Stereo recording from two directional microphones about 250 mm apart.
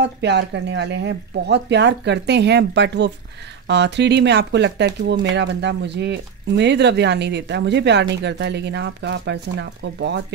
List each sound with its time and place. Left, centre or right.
0.0 s speech: right